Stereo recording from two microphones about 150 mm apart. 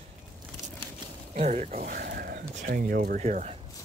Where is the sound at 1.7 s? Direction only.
70° right (ahead or behind).